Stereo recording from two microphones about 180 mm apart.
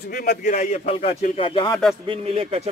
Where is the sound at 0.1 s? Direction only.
55° left (ahead or behind).